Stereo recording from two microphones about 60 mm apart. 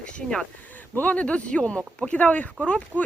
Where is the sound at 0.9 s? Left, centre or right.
Left.